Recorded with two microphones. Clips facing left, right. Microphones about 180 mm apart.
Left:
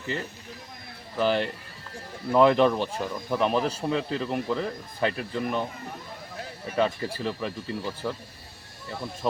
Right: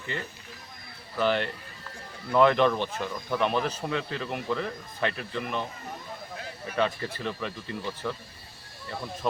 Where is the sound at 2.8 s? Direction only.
10° left (ahead or behind).